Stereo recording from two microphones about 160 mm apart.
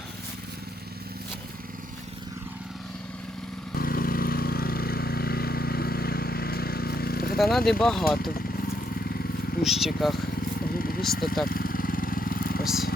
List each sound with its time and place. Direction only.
3.8 s vehicle: 65° left (ahead or behind)
7.5 s speech: 5° left (ahead or behind)
9.6 s speech: centre (ahead or behind)
10.8 s vehicle: 65° left (ahead or behind)
11.0 s speech: centre (ahead or behind)
11.4 s vehicle: 65° left (ahead or behind)
12.6 s speech: centre (ahead or behind)